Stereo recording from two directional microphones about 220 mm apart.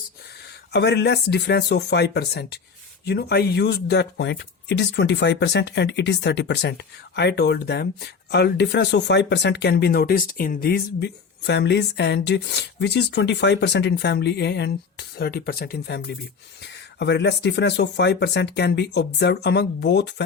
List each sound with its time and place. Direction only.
0.7 s speech: 50° left (ahead or behind)